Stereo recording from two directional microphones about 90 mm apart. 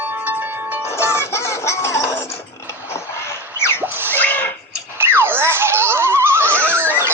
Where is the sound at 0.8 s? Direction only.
30° left (ahead or behind).